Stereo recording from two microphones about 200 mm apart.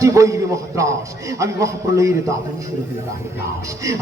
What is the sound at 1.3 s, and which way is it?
Speech, 15° right (ahead or behind).